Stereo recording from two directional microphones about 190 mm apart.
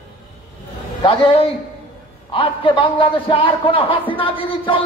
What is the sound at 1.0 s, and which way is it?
A man's voice, 30° left (ahead or behind).